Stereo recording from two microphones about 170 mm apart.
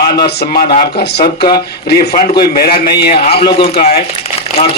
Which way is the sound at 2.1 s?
25° left (ahead or behind).